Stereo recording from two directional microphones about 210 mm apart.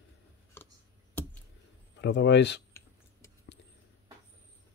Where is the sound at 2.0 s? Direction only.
55° left (ahead or behind).